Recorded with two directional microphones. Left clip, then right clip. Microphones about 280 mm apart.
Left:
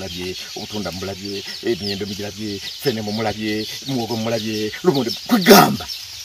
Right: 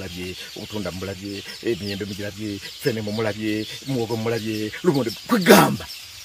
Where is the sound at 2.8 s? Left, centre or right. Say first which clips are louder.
Left 2 dB; centre.